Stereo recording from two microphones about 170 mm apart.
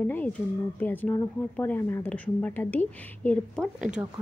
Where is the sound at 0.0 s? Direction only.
10° left (ahead or behind).